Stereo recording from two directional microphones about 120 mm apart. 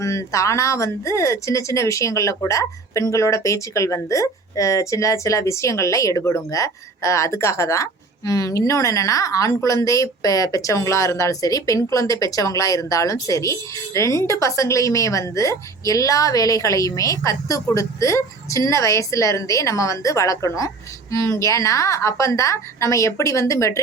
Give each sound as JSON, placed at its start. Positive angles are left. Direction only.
{"t": 0.0, "sound": "speech", "side_deg": 25}